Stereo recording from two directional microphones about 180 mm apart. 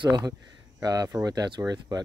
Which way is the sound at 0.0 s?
20° right (ahead or behind).